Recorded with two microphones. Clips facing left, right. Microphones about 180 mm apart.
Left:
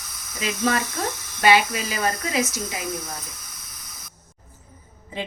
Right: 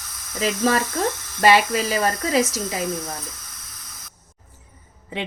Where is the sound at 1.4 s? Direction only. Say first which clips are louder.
Right 2 dB; 40° right (ahead or behind).